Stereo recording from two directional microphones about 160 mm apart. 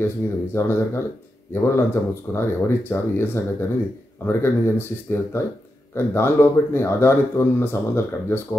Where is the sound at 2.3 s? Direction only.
15° left (ahead or behind).